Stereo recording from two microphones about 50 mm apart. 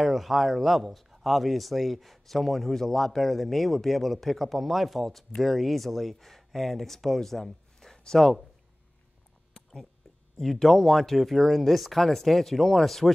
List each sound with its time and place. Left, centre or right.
0.0 s speech: centre
9.5 s a sound: centre
10.3 s speech: centre